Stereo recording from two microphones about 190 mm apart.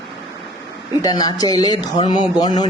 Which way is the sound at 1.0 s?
20° left (ahead or behind).